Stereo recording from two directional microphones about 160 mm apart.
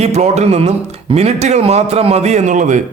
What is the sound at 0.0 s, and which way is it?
A man's voice, 45° right (ahead or behind).